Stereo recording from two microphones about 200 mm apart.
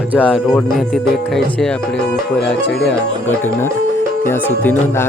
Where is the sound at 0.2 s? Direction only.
10° left (ahead or behind).